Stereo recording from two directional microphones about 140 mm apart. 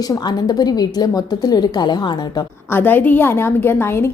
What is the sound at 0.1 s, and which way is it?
A woman's voice, 30° left (ahead or behind).